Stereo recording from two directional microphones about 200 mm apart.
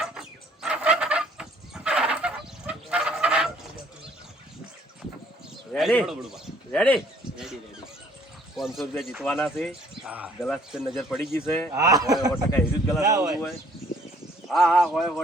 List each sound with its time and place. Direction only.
0.0 s fowl: 5° right (ahead or behind)
5.7 s speech: 5° left (ahead or behind)
8.5 s speech: centre (ahead or behind)
11.3 s speech: 10° left (ahead or behind)
11.7 s speech: 15° right (ahead or behind)
12.3 s speech: 10° left (ahead or behind)
13.0 s speech: 15° right (ahead or behind)
14.4 s speech: centre (ahead or behind)